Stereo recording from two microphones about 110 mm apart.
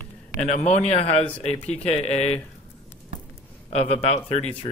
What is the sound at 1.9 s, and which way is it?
Speech, 80° left.